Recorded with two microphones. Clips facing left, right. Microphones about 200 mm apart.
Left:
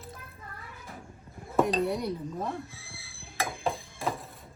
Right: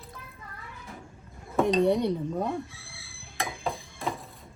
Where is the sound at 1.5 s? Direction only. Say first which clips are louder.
Right 4 dB; centre (ahead or behind).